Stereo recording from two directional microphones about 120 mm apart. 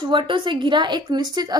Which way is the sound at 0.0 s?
40° right (ahead or behind).